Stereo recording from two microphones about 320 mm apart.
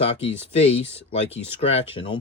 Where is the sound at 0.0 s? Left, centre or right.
Centre.